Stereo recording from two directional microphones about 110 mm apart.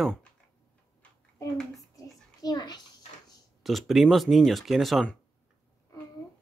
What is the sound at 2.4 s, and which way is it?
Speech, 40° left (ahead or behind).